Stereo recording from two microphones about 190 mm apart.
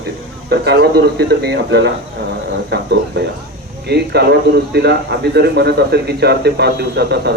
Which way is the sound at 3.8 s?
60° right (ahead or behind).